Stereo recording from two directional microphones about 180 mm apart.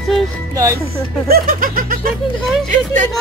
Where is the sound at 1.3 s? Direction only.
55° right (ahead or behind).